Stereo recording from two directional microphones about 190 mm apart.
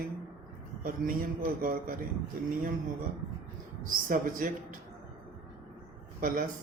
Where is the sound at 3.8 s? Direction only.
45° right (ahead or behind).